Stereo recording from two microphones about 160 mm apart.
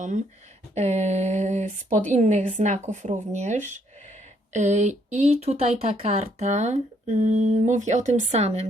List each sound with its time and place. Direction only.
0.7 s speech: 45° right (ahead or behind)